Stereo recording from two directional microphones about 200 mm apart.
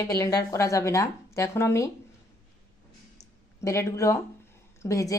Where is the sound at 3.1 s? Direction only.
15° left (ahead or behind).